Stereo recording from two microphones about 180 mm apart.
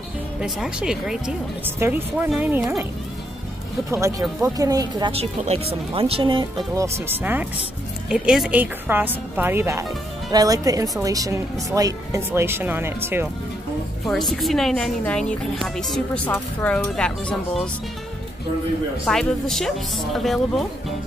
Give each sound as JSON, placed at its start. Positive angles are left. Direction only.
{"t": 0.4, "sound": "a woman's voice", "side_deg": -5}
{"t": 4.4, "sound": "speech", "side_deg": -20}
{"t": 5.1, "sound": "speech", "side_deg": -35}
{"t": 6.7, "sound": "speech", "side_deg": -15}
{"t": 14.0, "sound": "a woman's voice", "side_deg": 0}
{"t": 19.0, "sound": "a woman's voice", "side_deg": 0}